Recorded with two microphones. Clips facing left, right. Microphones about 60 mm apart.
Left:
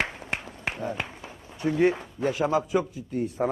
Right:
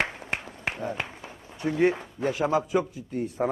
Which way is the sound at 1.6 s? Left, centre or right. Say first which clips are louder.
Left 1 dB; right.